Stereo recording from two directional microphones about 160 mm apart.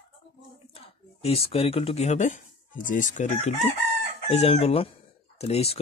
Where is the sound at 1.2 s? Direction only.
40° left (ahead or behind).